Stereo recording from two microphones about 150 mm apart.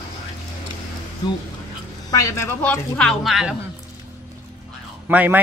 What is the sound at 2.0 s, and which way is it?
A woman's voice, 20° left (ahead or behind).